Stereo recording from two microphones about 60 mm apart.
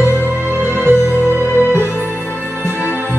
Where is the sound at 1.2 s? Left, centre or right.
Left.